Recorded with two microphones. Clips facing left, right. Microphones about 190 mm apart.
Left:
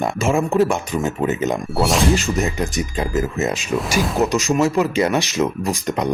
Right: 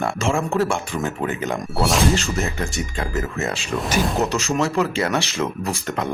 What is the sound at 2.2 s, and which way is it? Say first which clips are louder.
Speech: left 4 dB; 15° left (ahead or behind).